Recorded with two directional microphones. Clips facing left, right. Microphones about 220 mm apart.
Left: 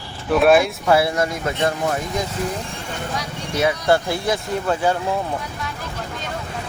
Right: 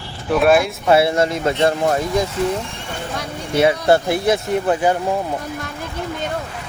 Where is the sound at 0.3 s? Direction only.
Centre (ahead or behind).